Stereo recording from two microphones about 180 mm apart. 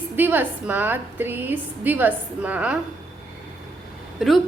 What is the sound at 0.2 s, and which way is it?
A woman's voice, 10° right (ahead or behind).